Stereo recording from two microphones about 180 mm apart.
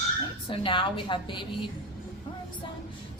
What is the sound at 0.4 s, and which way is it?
A woman's voice, 30° left (ahead or behind).